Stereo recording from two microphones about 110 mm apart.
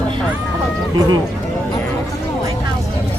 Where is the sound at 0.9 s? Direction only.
40° right (ahead or behind).